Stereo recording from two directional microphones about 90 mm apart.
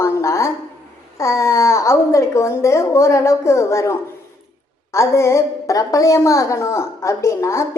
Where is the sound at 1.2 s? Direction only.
35° left (ahead or behind).